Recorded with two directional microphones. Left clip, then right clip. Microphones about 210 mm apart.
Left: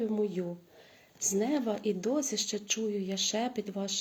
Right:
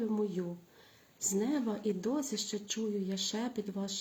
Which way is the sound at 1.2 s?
20° right (ahead or behind).